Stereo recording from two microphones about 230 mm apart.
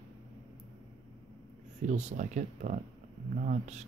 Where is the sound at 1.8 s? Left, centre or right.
Right.